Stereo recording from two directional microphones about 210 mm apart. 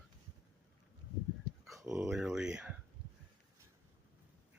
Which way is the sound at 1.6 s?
Centre (ahead or behind).